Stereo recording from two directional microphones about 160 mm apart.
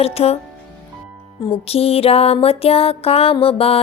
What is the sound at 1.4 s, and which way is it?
Speech, 30° left (ahead or behind).